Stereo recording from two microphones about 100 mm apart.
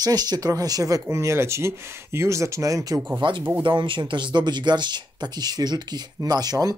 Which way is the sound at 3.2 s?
55° right (ahead or behind).